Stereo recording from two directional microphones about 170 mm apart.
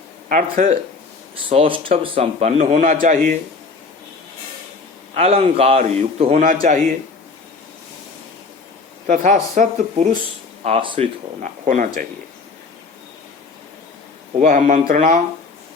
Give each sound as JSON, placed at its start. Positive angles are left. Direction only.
{"t": 0.3, "sound": "a man's voice", "side_deg": -50}
{"t": 1.5, "sound": "a man's voice", "side_deg": -30}
{"t": 5.1, "sound": "a man's voice", "side_deg": -40}
{"t": 9.0, "sound": "a man's voice", "side_deg": -45}
{"t": 10.6, "sound": "a man's voice", "side_deg": -35}
{"t": 11.4, "sound": "a man's voice", "side_deg": -50}
{"t": 14.3, "sound": "a man's voice", "side_deg": -45}